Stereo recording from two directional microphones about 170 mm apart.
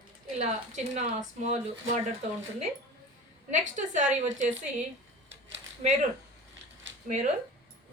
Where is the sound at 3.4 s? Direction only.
45° right (ahead or behind).